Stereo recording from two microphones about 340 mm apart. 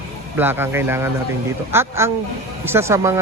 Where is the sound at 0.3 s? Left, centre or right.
Centre.